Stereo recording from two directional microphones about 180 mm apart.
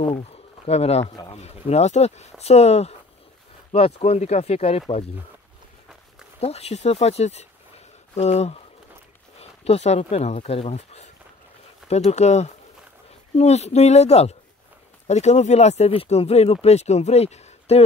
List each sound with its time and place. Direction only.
0.7 s speech: 35° left (ahead or behind)
1.0 s a man's voice: 20° left (ahead or behind)
1.3 s speech: 35° left (ahead or behind)
6.4 s speech: 35° left (ahead or behind)